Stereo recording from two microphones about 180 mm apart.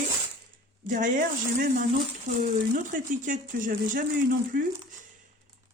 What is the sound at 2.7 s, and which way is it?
Speech, 45° right (ahead or behind).